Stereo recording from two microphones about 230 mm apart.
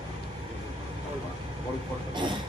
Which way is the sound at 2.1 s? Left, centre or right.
Centre.